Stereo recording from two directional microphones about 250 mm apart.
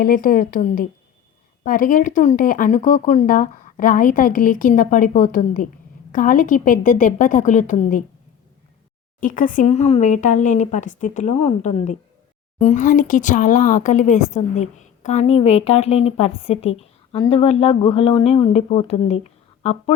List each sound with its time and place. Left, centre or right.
0.0 s speech: left
9.2 s speech: left